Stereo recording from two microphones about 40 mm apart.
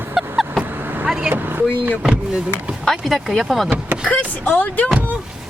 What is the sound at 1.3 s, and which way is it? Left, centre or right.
Speech, right.